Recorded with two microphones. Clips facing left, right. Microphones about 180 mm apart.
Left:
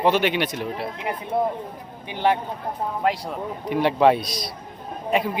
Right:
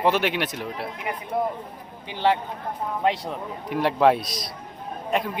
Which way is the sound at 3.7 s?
Centre (ahead or behind).